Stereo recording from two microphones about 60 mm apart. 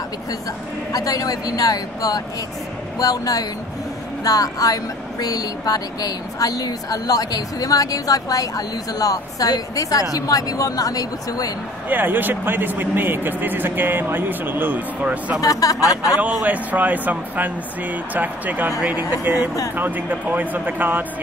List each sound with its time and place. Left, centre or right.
0.9 s speech: left
11.9 s speech: right
15.4 s speech: left
16.4 s speech: right